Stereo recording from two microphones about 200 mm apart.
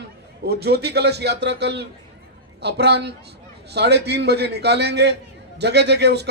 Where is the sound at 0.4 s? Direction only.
55° right (ahead or behind).